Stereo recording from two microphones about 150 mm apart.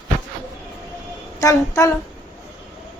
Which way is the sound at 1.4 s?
20° left (ahead or behind).